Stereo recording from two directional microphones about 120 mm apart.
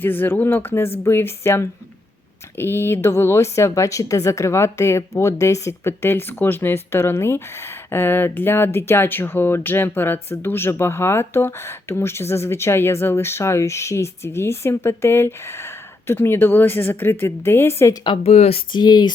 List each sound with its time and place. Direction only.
0.0 s a woman's voice: 15° left (ahead or behind)
18.2 s speech: 60° left (ahead or behind)
18.7 s speech: 40° left (ahead or behind)